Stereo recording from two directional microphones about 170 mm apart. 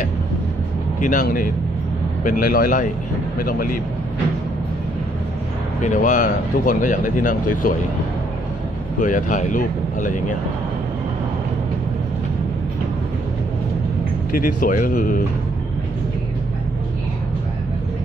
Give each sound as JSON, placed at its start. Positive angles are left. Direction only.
{"t": 1.0, "sound": "speech", "side_deg": 50}
{"t": 5.8, "sound": "speech", "side_deg": 45}
{"t": 9.0, "sound": "speech", "side_deg": 50}
{"t": 14.3, "sound": "speech", "side_deg": 50}